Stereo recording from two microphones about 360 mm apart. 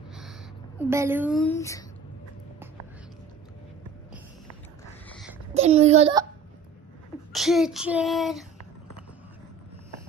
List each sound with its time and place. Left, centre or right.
0.7 s child singing: centre
5.5 s a child's voice: centre
7.3 s child singing: centre